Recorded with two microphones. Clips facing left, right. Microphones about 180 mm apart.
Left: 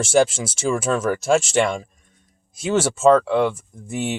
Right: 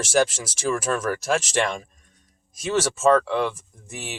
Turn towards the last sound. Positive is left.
turn(degrees=25)  # may be behind; listen again after turning